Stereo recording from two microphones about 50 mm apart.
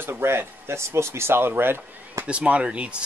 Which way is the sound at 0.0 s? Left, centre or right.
Right.